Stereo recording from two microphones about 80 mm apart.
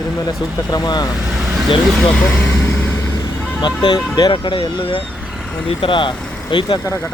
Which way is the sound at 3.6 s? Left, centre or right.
Left.